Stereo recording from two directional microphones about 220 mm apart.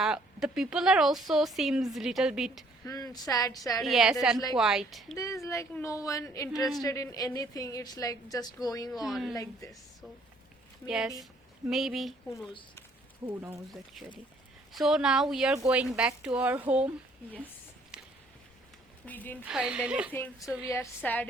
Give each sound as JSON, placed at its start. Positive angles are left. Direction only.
{"t": 0.0, "sound": "speech", "side_deg": -5}
{"t": 2.8, "sound": "a woman's voice", "side_deg": 15}
{"t": 3.8, "sound": "speech", "side_deg": 0}
{"t": 5.1, "sound": "a woman's voice", "side_deg": 15}
{"t": 6.6, "sound": "speech", "side_deg": 0}
{"t": 6.8, "sound": "a woman's voice", "side_deg": 15}
{"t": 8.9, "sound": "speech", "side_deg": 0}
{"t": 9.3, "sound": "a woman's voice", "side_deg": 15}
{"t": 10.8, "sound": "a woman's voice", "side_deg": -5}
{"t": 17.9, "sound": "a sound", "side_deg": -5}
{"t": 19.0, "sound": "a woman's voice", "side_deg": 10}
{"t": 19.5, "sound": "speech", "side_deg": -5}
{"t": 20.1, "sound": "a woman's voice", "side_deg": 5}